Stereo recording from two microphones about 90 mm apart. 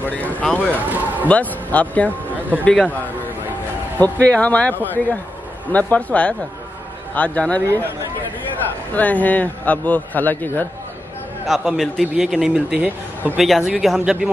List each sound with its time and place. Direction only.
0.0 s speech: 20° left (ahead or behind)
0.8 s a sound: 20° right (ahead or behind)
1.2 s a man's voice: 15° left (ahead or behind)
4.0 s a man's voice: 15° left (ahead or behind)
8.9 s a man's voice: 20° left (ahead or behind)
11.4 s a man's voice: 5° right (ahead or behind); by 13.4 s 20° right (ahead or behind)
13.4 s a man's voice: centre (ahead or behind)